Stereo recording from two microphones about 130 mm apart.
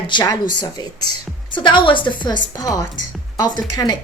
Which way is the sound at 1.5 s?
40° left (ahead or behind).